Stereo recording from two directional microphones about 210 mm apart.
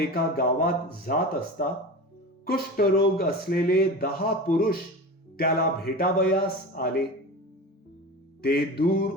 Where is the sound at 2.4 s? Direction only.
45° left (ahead or behind).